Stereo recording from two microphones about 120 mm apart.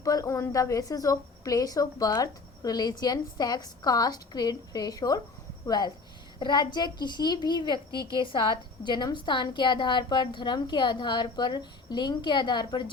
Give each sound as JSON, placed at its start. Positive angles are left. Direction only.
{"t": 0.0, "sound": "a woman's voice", "side_deg": 30}